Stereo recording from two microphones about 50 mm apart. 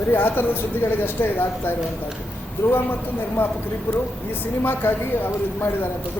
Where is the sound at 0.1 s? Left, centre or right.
Left.